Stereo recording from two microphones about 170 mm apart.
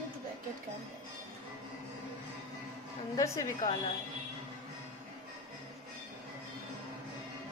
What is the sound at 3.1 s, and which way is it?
Speech, 15° left (ahead or behind).